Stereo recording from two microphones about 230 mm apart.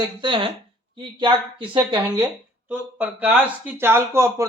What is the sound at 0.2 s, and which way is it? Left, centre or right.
A woman's voice, right.